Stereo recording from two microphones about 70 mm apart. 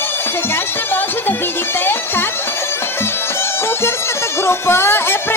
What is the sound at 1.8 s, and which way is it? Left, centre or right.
Music, left.